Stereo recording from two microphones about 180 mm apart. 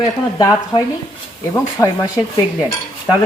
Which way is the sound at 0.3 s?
20° left (ahead or behind).